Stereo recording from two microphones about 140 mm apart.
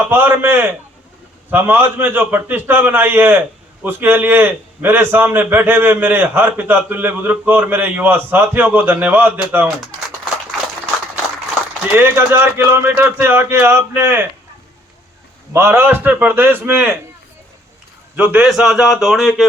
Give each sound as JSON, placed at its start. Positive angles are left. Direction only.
{"t": 0.1, "sound": "a man's voice", "side_deg": -15}
{"t": 11.9, "sound": "a man's voice", "side_deg": -15}
{"t": 15.5, "sound": "a man's voice", "side_deg": -20}
{"t": 18.2, "sound": "a man's voice", "side_deg": -10}